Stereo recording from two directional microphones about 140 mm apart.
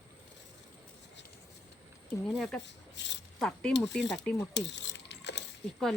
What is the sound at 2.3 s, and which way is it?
Speech, centre (ahead or behind).